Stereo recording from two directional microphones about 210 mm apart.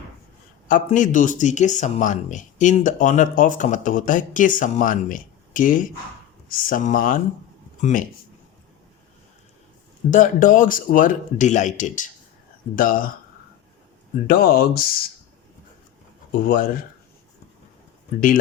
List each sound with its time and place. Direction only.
0.7 s speech: 40° left (ahead or behind)
10.1 s speech: 40° left (ahead or behind)
14.3 s speech: 45° left (ahead or behind)
16.3 s speech: 45° left (ahead or behind)